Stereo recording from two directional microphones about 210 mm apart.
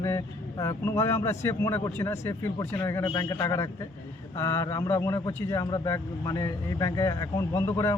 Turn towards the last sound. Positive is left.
turn(degrees=15)  # may be behind; listen again after turning